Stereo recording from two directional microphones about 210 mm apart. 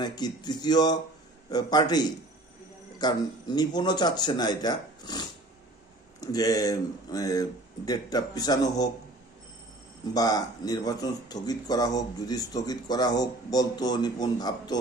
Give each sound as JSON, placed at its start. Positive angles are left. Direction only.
{"t": 0.0, "sound": "speech", "side_deg": 20}
{"t": 10.1, "sound": "speech", "side_deg": 20}